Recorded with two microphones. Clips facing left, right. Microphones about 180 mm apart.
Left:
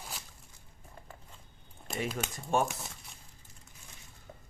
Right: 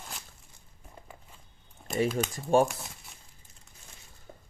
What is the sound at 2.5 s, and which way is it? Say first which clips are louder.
Speech: right 6 dB; 35° right (ahead or behind).